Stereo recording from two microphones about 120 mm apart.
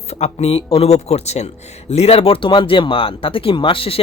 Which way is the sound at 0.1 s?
60° left (ahead or behind).